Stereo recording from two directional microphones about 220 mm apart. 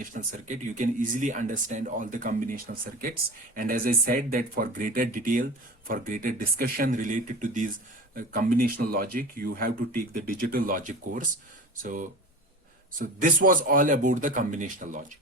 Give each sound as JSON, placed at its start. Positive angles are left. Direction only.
{"t": 0.0, "sound": "speech", "side_deg": -35}